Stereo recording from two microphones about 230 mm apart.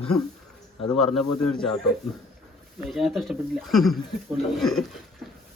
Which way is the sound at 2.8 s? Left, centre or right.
Centre.